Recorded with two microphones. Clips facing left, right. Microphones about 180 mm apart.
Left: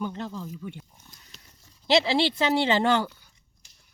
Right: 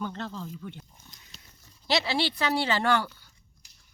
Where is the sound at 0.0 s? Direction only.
15° left (ahead or behind).